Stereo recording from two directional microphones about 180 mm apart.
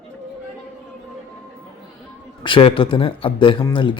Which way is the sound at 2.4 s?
30° left (ahead or behind).